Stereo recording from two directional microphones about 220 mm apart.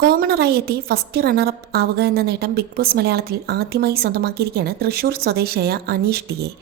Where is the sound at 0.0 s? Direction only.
45° right (ahead or behind).